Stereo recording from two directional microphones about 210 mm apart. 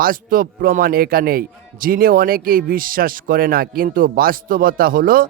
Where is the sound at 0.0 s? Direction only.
45° right (ahead or behind).